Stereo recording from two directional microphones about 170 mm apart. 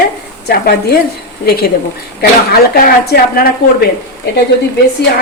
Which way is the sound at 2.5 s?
65° left (ahead or behind).